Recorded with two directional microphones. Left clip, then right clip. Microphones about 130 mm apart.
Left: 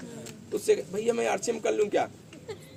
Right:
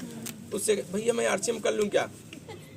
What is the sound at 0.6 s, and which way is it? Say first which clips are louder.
A man's voice: left 1 dB; 30° left (ahead or behind).